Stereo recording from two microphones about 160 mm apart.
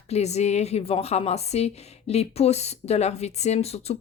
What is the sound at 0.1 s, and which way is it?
A woman's voice, 45° left (ahead or behind).